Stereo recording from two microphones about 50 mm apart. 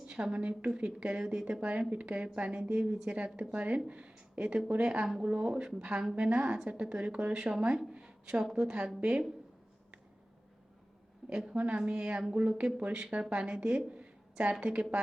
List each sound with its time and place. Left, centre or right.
0.1 s a woman's voice: centre
8.0 s a sound: centre
8.5 s speech: centre
11.3 s a woman's voice: centre